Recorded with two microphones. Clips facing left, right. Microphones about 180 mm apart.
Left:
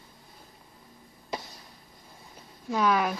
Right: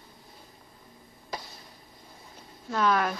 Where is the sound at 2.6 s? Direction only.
5° left (ahead or behind).